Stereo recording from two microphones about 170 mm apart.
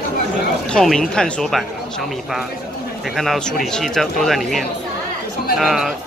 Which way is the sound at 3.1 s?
Centre (ahead or behind).